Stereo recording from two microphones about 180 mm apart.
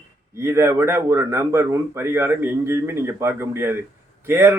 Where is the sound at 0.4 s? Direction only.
15° right (ahead or behind).